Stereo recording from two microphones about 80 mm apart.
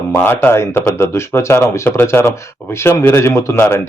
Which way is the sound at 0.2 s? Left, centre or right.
Left.